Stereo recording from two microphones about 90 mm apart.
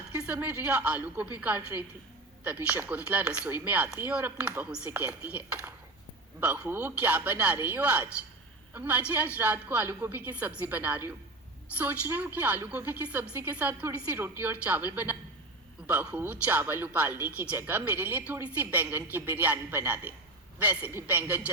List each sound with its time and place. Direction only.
0.3 s a woman's voice: 20° right (ahead or behind)